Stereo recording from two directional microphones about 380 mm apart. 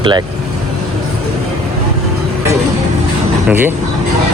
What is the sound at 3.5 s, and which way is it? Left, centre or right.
Speech, centre.